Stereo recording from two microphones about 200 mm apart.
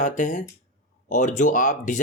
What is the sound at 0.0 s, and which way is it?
Speech, 40° left (ahead or behind).